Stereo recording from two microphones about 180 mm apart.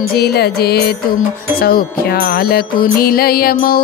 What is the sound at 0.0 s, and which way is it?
Music, 60° left (ahead or behind).